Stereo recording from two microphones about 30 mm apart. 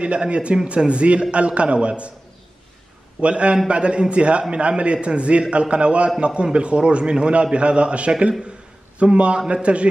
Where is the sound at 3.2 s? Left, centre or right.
Right.